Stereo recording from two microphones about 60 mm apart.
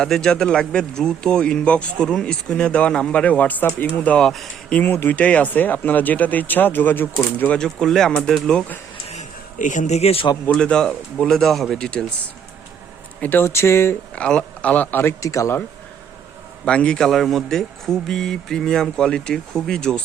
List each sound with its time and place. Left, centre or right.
0.0 s speech: centre
4.2 s speech: centre
4.8 s speech: left
5.1 s speech: left
7.6 s speech: centre
10.6 s speech: centre
13.1 s speech: left
13.4 s speech: left
14.2 s speech: centre
15.2 s speech: left
16.6 s speech: centre
17.1 s speech: centre